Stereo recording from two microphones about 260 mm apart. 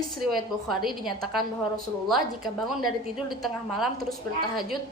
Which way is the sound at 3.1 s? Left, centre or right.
Centre.